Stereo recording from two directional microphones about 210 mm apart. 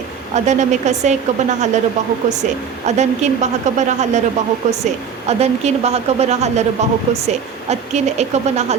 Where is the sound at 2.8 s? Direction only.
35° right (ahead or behind).